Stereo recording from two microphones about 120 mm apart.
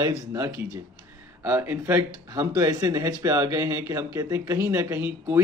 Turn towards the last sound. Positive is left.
turn(degrees=-20)  # may be behind; listen again after turning